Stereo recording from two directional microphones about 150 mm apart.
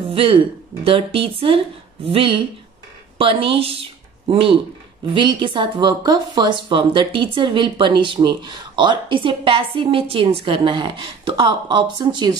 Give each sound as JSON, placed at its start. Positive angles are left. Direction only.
{"t": 0.1, "sound": "speech", "side_deg": -35}